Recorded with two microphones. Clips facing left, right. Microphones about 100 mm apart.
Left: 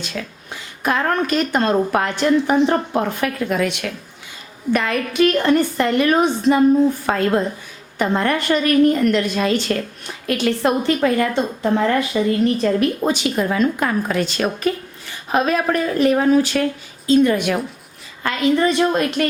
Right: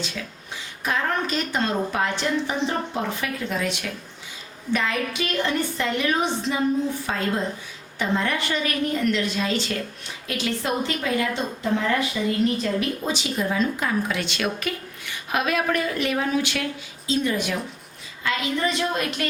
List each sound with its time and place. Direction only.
0.5 s a woman's voice: 55° left (ahead or behind)
7.1 s a woman's voice: 65° left (ahead or behind); by 16.6 s 40° left (ahead or behind)
17.1 s a woman's voice: 55° left (ahead or behind)